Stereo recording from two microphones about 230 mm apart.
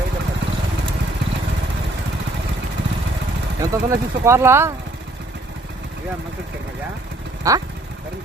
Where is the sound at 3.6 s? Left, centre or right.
Centre.